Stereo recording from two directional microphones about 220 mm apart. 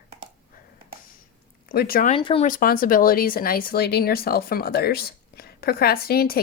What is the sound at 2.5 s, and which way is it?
Speech, 40° left (ahead or behind).